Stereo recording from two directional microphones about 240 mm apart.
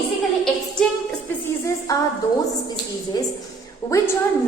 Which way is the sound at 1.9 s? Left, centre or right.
Centre.